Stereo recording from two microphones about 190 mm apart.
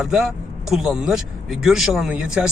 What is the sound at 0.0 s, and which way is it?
Speech, centre (ahead or behind).